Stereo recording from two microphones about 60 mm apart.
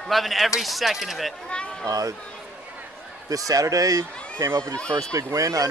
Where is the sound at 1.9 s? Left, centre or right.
Right.